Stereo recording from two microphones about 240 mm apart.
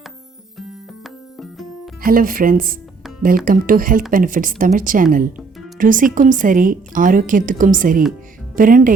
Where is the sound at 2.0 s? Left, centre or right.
Right.